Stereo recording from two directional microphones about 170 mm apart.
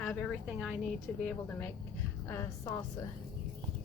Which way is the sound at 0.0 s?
10° left (ahead or behind).